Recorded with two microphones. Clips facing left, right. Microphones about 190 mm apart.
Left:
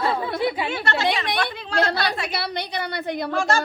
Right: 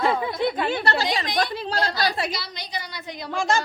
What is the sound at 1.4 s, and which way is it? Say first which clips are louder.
Speech: right 2 dB; 35° right (ahead or behind).